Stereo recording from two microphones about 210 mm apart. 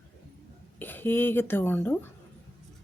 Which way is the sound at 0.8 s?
10° left (ahead or behind).